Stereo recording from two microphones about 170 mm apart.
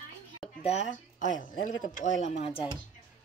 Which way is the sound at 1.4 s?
50° left (ahead or behind).